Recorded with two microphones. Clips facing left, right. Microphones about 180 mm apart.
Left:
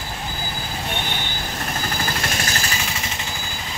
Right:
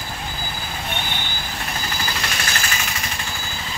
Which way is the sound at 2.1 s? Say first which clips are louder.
Left 2 dB; 45° left (ahead or behind).